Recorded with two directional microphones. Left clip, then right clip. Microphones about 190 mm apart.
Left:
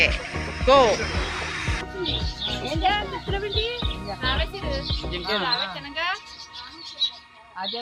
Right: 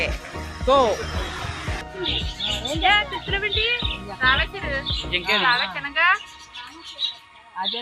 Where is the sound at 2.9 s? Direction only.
25° left (ahead or behind).